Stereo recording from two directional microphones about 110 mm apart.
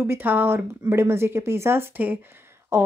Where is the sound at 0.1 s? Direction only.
15° right (ahead or behind).